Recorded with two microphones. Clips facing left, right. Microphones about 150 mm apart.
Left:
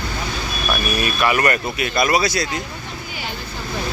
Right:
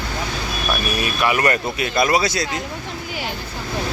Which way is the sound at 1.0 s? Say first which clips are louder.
Even; 20° right (ahead or behind).